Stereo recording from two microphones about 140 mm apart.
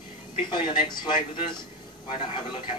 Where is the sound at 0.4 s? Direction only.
35° left (ahead or behind).